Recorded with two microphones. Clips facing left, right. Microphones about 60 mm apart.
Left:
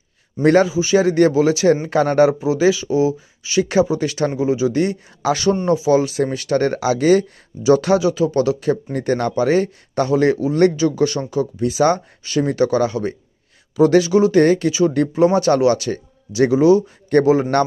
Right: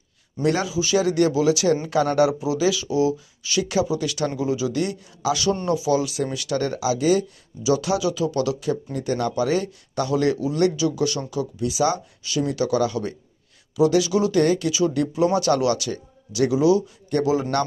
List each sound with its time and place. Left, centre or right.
0.4 s a man's voice: left
0.7 s speech: left
8.0 s speech: left